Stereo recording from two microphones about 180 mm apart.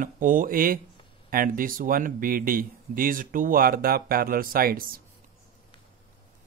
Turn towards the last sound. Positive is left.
turn(degrees=-55)  # may be behind; listen again after turning